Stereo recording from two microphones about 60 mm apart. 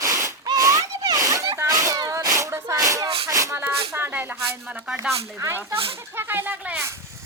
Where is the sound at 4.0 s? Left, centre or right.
Right.